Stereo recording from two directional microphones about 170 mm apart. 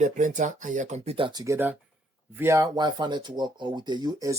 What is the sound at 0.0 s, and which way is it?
Speech, 45° right (ahead or behind).